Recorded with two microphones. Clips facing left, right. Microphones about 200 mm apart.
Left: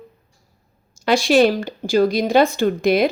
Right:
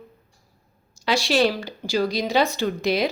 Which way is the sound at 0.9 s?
50° left (ahead or behind).